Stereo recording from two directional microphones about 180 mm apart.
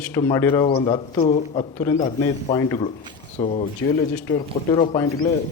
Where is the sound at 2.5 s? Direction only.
20° left (ahead or behind).